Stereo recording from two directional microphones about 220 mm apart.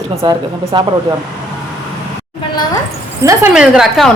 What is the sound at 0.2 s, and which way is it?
Speech, 25° right (ahead or behind).